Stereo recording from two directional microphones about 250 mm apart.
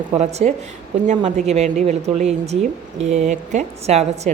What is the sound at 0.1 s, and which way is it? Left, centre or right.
A woman's voice, right.